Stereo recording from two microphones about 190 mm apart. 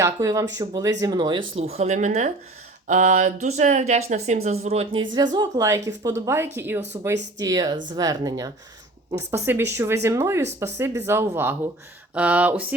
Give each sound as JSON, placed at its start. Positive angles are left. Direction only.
{"t": 0.0, "sound": "a woman's voice", "side_deg": -15}